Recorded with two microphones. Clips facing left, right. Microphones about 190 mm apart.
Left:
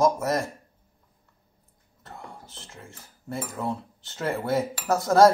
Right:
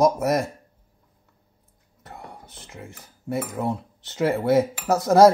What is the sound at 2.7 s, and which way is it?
Cutlery, 20° right (ahead or behind).